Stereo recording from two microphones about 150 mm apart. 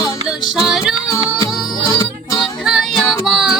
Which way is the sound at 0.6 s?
Centre (ahead or behind).